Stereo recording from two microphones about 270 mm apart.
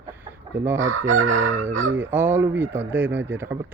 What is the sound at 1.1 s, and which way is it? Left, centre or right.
Chicken, right.